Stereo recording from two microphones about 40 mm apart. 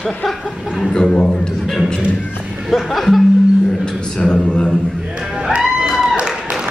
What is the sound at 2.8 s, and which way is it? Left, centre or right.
Speech, centre.